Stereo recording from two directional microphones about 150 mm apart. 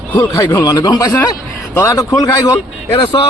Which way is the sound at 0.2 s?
30° left (ahead or behind).